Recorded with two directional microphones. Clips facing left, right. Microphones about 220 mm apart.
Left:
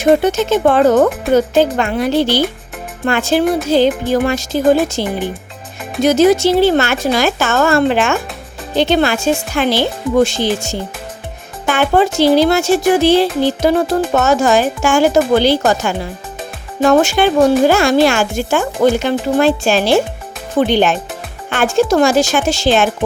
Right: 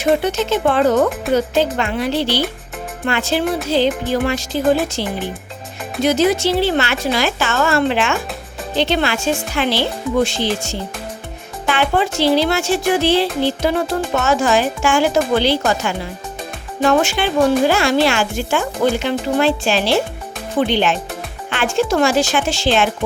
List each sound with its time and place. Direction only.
0.0 s speech: 45° left (ahead or behind)